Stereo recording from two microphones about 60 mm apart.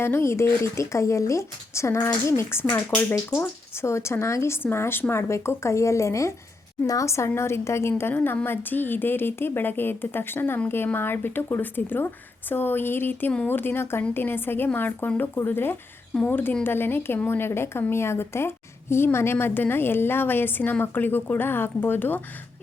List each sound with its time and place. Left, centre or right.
0.0 s speech: left
3.8 s speech: left
5.3 s a woman's voice: left